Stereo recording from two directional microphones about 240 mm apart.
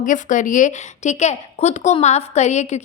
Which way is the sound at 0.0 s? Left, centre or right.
Left.